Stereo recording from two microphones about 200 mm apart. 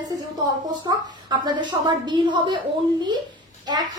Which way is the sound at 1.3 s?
20° right (ahead or behind).